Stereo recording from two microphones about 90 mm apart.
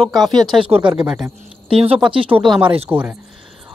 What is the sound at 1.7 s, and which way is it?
Speech, 90° right.